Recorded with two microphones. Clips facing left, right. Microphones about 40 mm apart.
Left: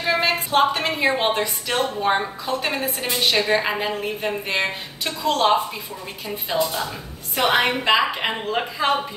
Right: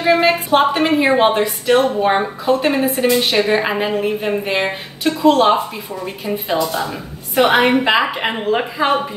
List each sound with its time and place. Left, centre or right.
0.2 s a woman's voice: centre
6.2 s a woman's voice: centre